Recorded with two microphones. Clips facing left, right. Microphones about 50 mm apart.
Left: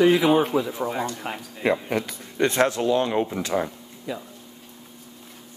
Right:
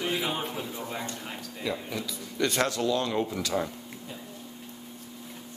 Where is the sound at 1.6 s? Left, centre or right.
Left.